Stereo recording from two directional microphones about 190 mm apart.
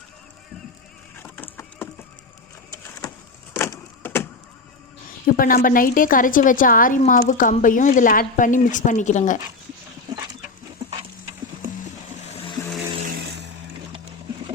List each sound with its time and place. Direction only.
1.1 s sheep: 10° left (ahead or behind)
1.5 s a sound: 10° left (ahead or behind)
2.7 s vehicle: 15° left (ahead or behind)
3.5 s a sound: 15° left (ahead or behind)
5.2 s a woman's voice: 50° left (ahead or behind)
13.1 s vehicle: 60° right (ahead or behind)